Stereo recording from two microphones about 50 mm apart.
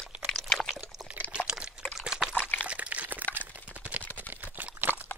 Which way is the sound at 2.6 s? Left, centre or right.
Right.